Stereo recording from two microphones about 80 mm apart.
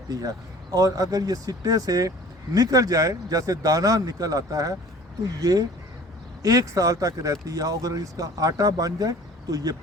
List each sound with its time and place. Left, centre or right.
0.1 s speech: right